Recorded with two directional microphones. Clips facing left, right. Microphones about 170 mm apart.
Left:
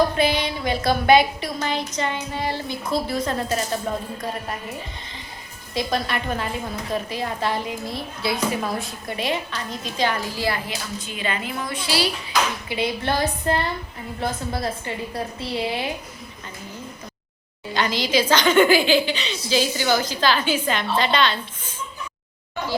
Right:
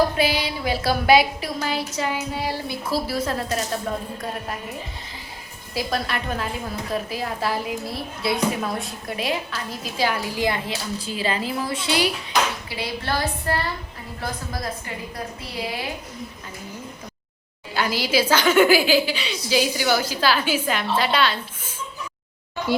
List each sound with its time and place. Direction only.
0.2 s a woman's voice: 5° right (ahead or behind); by 12.0 s 25° right (ahead or behind)
12.6 s a woman's voice: 20° left (ahead or behind)
17.7 s a woman's voice: 10° right (ahead or behind)